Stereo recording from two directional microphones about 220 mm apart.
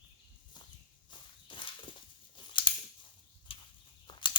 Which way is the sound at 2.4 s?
20° left (ahead or behind).